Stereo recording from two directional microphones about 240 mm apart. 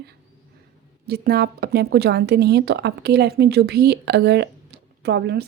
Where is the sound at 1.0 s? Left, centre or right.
Right.